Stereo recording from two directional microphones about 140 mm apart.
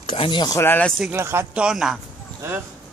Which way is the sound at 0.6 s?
15° left (ahead or behind).